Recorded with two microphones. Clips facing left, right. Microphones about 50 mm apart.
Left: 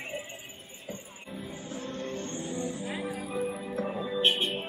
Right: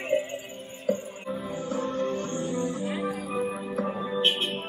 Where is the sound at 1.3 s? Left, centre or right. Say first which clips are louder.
Right 8 dB; right.